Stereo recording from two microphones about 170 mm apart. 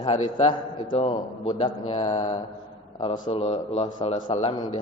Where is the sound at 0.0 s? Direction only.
30° left (ahead or behind).